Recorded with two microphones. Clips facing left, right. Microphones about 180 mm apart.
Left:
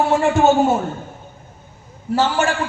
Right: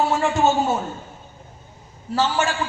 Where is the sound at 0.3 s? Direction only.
55° left (ahead or behind).